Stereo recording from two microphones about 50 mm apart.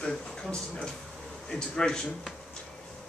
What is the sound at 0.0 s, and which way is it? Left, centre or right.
Speech, centre.